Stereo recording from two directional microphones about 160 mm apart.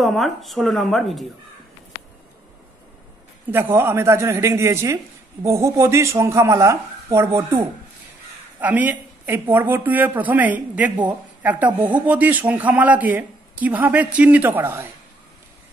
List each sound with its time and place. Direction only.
0.0 s speech: centre (ahead or behind)
3.4 s speech: 15° right (ahead or behind)